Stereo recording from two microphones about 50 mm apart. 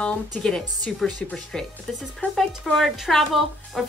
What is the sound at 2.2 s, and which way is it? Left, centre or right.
Speech, left.